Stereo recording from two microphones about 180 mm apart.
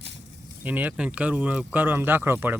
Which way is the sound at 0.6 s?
10° right (ahead or behind).